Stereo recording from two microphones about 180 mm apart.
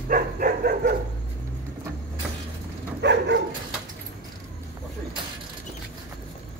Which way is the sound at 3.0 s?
75° right (ahead or behind).